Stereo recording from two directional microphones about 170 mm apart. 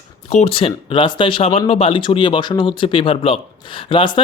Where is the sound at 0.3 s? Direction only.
40° left (ahead or behind).